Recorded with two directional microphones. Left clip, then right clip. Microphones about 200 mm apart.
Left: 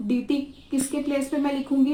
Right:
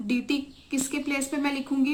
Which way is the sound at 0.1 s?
20° right (ahead or behind).